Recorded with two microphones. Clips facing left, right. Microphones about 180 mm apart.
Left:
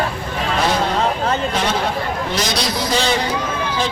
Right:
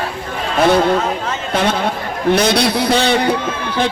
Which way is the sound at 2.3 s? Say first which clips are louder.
Right 8 dB; 60° right (ahead or behind).